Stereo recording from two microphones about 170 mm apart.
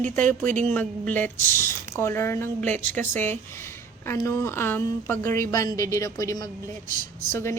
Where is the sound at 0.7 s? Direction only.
10° left (ahead or behind).